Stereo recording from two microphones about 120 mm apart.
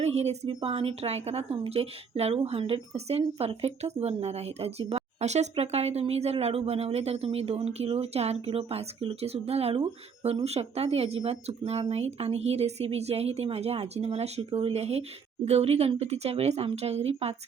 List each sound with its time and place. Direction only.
0.0 s speech: 60° right (ahead or behind)